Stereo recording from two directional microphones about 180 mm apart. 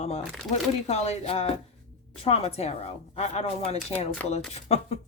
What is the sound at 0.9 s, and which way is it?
Speech, 35° left (ahead or behind).